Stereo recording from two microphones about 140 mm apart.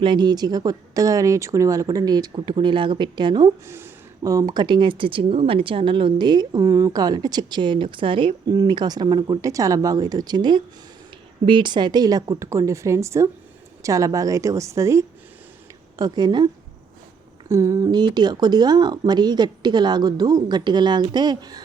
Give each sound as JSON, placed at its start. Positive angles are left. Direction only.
{"t": 0.0, "sound": "speech", "side_deg": -35}
{"t": 3.7, "sound": "speech", "side_deg": -20}
{"t": 17.5, "sound": "speech", "side_deg": -25}